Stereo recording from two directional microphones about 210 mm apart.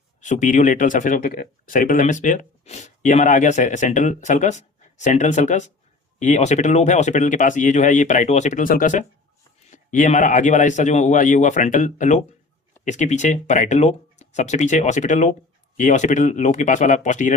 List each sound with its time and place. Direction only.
0.2 s speech: 35° left (ahead or behind)